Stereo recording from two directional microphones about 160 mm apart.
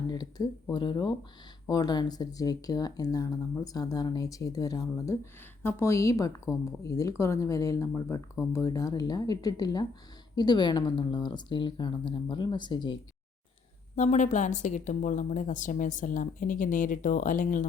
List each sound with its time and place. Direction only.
0.1 s speech: 25° left (ahead or behind)
13.9 s a woman's voice: 45° left (ahead or behind)